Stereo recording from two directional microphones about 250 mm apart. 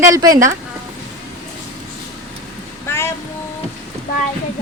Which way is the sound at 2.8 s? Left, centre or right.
Centre.